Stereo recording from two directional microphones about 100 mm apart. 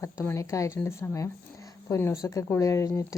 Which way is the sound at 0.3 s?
30° left (ahead or behind).